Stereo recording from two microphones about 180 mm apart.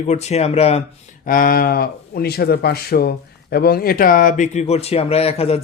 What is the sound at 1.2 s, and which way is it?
A man's voice, 50° left (ahead or behind).